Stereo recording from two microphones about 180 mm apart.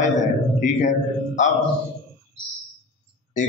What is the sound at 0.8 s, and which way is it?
Speech, 40° left (ahead or behind).